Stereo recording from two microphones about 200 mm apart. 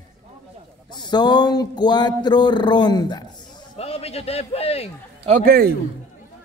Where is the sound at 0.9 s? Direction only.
20° left (ahead or behind).